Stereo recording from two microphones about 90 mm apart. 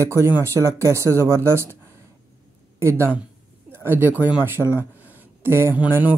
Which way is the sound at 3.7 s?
25° right (ahead or behind).